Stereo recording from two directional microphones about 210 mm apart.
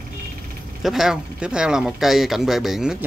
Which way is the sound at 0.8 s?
Centre (ahead or behind).